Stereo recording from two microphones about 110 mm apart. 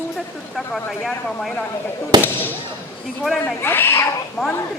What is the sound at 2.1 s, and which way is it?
Speech, 40° right (ahead or behind).